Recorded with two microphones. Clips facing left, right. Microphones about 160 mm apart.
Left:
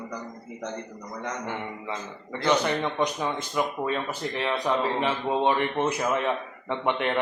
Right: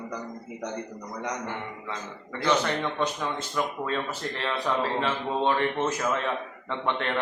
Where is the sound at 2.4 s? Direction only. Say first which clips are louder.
Left 1 dB; 15° left (ahead or behind).